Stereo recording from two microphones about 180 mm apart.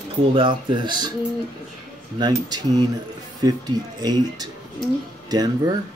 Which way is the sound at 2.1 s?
25° right (ahead or behind).